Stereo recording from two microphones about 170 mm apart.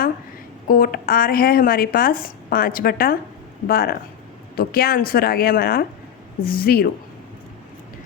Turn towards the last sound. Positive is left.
turn(degrees=60)  # may be behind; listen again after turning